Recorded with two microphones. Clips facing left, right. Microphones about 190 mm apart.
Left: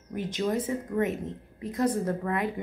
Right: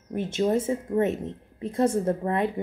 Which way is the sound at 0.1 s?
25° right (ahead or behind).